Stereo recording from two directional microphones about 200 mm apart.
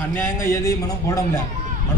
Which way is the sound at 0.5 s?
15° left (ahead or behind).